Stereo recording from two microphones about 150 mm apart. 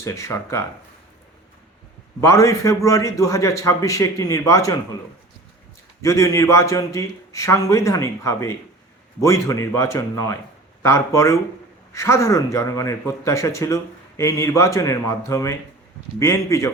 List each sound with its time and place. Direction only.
0.0 s a man's voice: 20° left (ahead or behind)
2.2 s a man's voice: 20° left (ahead or behind)
6.0 s a man's voice: 20° left (ahead or behind)